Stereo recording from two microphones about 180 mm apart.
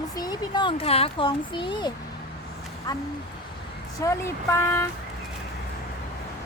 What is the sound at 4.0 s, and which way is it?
Speech, 15° left (ahead or behind).